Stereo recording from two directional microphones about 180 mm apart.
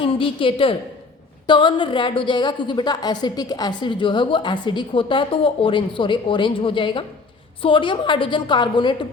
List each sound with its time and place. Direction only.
0.0 s a woman's voice: 30° left (ahead or behind)